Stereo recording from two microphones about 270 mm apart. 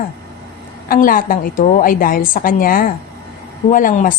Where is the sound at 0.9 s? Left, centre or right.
Left.